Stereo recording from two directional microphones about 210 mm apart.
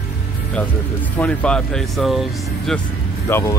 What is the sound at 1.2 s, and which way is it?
Speech, 5° left (ahead or behind).